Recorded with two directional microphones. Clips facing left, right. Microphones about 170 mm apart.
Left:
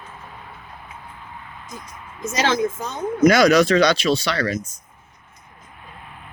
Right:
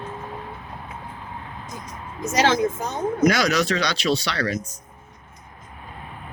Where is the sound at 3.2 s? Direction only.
50° left (ahead or behind).